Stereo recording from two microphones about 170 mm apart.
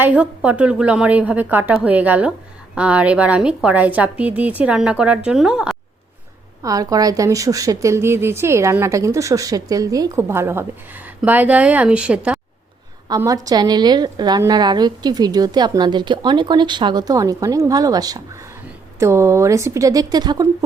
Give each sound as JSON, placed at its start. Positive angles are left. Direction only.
{"t": 0.0, "sound": "speech", "side_deg": -10}
{"t": 6.6, "sound": "speech", "side_deg": -20}
{"t": 13.1, "sound": "a woman's voice", "side_deg": -20}